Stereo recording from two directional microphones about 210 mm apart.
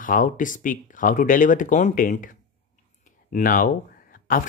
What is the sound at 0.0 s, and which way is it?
Speech, 40° left (ahead or behind).